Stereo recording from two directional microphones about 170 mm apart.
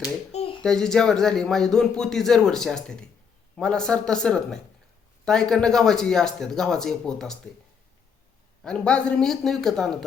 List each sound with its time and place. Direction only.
0.3 s a sound: 40° left (ahead or behind)
0.6 s a man's voice: 5° left (ahead or behind)
8.6 s a man's voice: 5° left (ahead or behind)